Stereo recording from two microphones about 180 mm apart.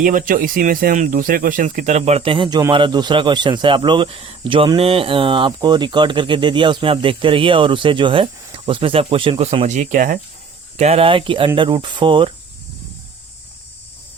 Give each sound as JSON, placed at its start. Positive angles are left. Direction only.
{"t": 0.0, "sound": "speech", "side_deg": -50}
{"t": 10.8, "sound": "speech", "side_deg": -35}